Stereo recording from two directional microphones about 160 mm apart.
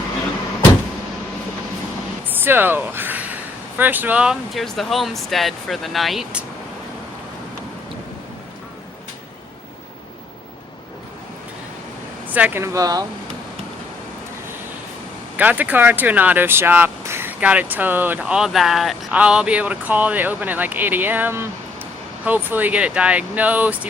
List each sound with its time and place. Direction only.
2.4 s speech: 10° right (ahead or behind)
12.3 s speech: 10° right (ahead or behind)
15.4 s speech: 10° right (ahead or behind)